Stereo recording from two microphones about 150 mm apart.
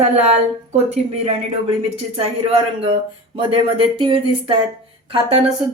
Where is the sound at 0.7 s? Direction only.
45° right (ahead or behind).